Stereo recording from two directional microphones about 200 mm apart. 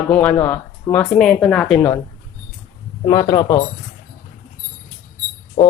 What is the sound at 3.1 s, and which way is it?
Speech, 20° left (ahead or behind).